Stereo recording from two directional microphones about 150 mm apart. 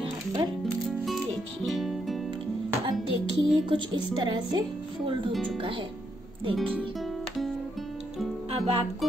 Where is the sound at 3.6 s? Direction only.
30° right (ahead or behind).